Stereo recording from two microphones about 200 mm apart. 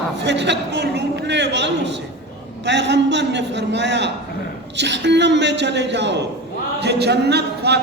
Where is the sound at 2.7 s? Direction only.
60° right (ahead or behind).